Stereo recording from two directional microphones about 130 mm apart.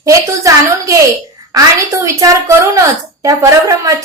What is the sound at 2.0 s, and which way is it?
A woman's voice, 25° right (ahead or behind).